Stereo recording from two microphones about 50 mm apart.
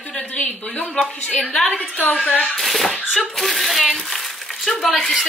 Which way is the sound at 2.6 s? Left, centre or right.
Centre.